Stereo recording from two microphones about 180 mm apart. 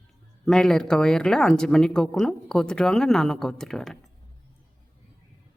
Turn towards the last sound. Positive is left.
turn(degrees=0)  # may be behind; listen again after turning